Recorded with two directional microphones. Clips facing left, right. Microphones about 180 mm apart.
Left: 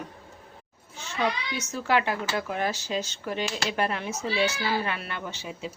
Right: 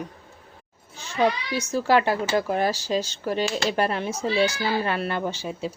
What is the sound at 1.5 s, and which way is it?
Speech, 35° right (ahead or behind).